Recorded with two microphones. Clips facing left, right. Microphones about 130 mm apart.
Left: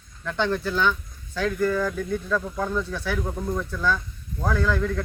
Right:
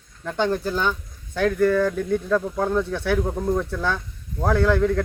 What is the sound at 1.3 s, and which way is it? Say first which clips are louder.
Speech: right 5 dB; 55° right (ahead or behind).